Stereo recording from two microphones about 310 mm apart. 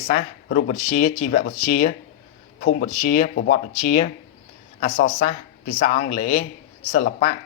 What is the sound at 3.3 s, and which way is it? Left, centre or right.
Speech, left.